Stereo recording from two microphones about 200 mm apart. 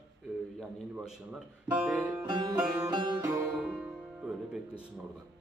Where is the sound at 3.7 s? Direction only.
5° right (ahead or behind).